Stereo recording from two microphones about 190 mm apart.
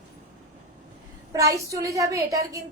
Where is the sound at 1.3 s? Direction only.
15° right (ahead or behind).